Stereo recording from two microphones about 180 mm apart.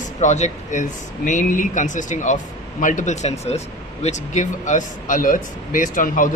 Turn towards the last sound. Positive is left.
turn(degrees=45)  # may be behind; listen again after turning